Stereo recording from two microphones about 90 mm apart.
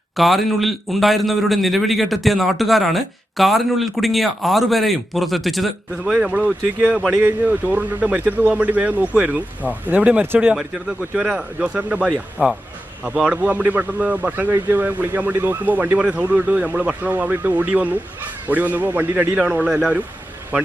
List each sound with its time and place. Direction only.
0.2 s a man's voice: centre (ahead or behind)
6.2 s a man's voice: 10° right (ahead or behind)